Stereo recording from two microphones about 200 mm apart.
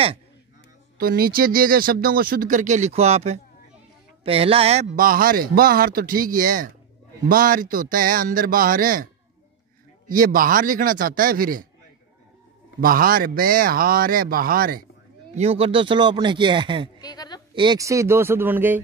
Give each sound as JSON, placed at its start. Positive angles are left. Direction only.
{"t": 0.9, "sound": "speech", "side_deg": -45}
{"t": 12.8, "sound": "speech", "side_deg": -45}
{"t": 15.3, "sound": "speech", "side_deg": -30}
{"t": 17.0, "sound": "a sound", "side_deg": 20}
{"t": 17.6, "sound": "speech", "side_deg": -20}